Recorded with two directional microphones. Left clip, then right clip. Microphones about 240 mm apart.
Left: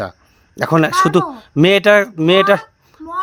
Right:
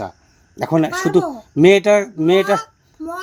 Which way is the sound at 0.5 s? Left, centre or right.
Left.